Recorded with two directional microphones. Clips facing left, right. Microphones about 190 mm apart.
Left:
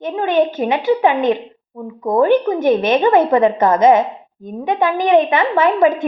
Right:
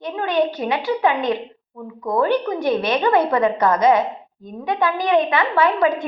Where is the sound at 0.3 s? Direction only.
45° left (ahead or behind).